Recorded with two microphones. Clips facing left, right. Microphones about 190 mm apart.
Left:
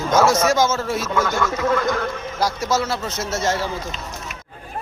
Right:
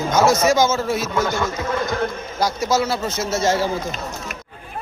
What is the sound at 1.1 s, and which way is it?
Speech, 20° right (ahead or behind).